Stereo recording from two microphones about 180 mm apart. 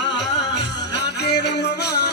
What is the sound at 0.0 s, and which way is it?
Music, 75° left (ahead or behind).